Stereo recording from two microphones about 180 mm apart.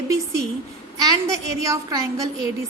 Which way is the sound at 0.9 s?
20° right (ahead or behind).